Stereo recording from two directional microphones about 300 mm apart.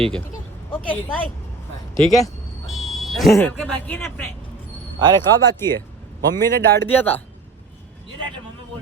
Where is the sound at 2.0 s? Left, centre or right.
Centre.